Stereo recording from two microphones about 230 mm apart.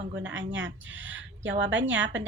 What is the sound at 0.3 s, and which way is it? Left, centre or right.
A woman's voice, right.